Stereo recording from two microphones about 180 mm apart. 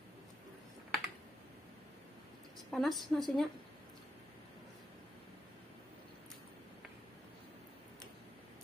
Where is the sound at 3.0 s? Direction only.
Centre (ahead or behind).